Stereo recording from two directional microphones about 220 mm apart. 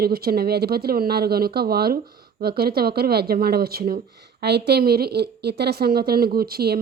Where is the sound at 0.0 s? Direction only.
45° right (ahead or behind).